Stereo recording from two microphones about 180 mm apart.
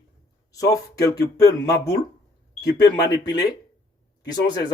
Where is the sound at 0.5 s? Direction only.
20° left (ahead or behind).